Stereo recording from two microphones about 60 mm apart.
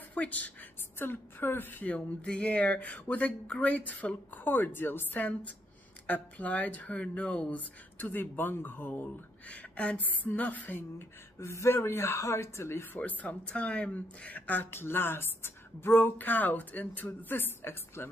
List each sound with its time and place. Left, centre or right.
0.1 s a woman's voice: left
0.9 s speech: left
2.0 s speech: centre; by 11.1 s left
11.3 s speech: left
13.0 s speech: left